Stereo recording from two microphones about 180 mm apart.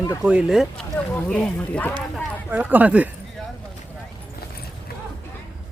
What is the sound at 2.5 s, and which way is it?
Speech, 10° right (ahead or behind).